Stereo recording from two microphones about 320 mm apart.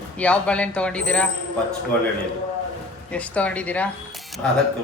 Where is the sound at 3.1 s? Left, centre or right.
Centre.